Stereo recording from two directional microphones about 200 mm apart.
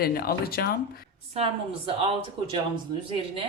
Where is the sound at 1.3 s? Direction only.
30° right (ahead or behind).